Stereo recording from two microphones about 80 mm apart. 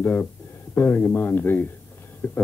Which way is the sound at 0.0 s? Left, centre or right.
Left.